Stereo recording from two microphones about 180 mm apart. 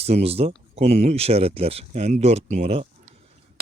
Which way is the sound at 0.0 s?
35° right (ahead or behind).